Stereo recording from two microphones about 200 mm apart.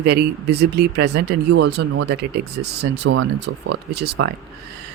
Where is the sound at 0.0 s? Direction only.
55° right (ahead or behind).